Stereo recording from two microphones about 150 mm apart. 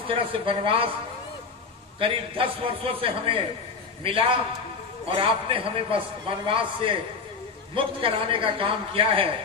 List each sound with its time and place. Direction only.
0.1 s a man's voice: 35° right (ahead or behind)
2.0 s a man's voice: 35° right (ahead or behind)